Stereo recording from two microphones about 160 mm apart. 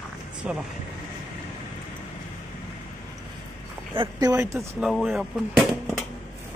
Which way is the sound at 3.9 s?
30° right (ahead or behind).